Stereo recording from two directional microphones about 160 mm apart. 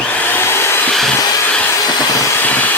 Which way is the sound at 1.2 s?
20° left (ahead or behind).